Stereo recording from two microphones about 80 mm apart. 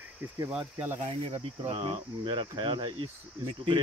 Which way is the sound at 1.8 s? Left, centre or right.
Right.